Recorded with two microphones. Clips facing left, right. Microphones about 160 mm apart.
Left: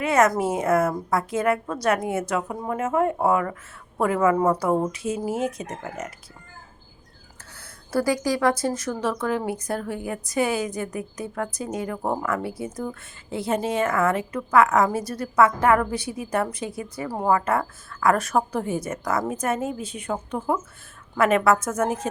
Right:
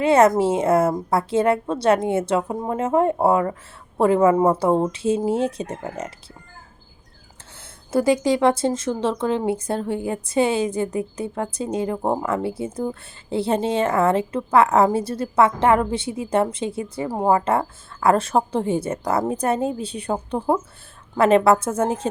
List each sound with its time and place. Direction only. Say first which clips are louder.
0.0 s speech: right 5 dB; 30° right (ahead or behind)
7.9 s speech: right 4 dB; 20° right (ahead or behind)